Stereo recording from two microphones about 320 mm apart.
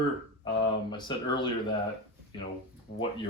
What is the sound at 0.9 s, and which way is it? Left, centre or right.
Speech, centre.